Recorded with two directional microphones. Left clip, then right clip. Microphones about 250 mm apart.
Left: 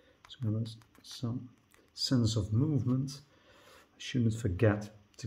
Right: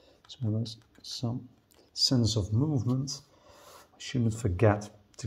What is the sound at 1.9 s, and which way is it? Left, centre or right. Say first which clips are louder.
Speech: right 5 dB; centre.